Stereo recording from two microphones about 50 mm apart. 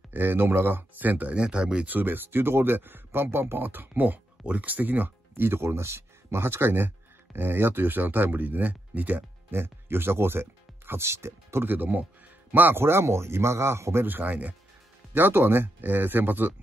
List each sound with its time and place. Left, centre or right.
0.1 s speech: right
1.9 s speech: right
9.5 s speech: right
11.6 s speech: right
14.0 s speech: right
15.1 s speech: right